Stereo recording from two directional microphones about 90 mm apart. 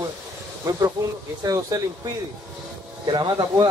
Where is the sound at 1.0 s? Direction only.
35° right (ahead or behind).